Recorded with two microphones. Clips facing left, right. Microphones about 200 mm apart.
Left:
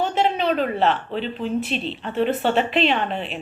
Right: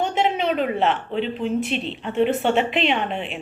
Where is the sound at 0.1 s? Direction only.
15° right (ahead or behind).